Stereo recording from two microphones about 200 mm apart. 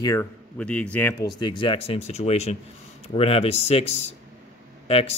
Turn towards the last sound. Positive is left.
turn(degrees=30)  # may be behind; listen again after turning